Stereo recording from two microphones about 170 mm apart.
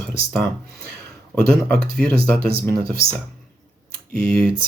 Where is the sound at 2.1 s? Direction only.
60° right (ahead or behind).